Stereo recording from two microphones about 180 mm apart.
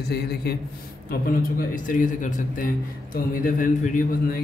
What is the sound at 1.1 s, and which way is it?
A man's voice, 50° left (ahead or behind).